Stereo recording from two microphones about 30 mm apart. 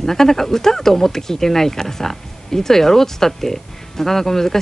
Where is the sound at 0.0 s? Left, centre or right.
Centre.